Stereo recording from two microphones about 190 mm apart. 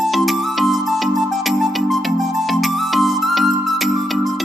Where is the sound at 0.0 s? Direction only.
Centre (ahead or behind).